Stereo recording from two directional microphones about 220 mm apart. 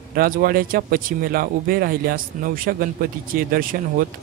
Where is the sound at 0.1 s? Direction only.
40° right (ahead or behind).